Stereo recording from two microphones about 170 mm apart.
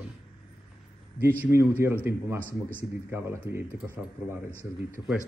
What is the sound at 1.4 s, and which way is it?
Speech, 15° right (ahead or behind).